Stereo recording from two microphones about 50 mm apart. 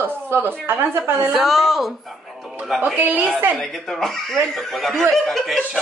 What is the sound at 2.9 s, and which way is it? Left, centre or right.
Speech, right.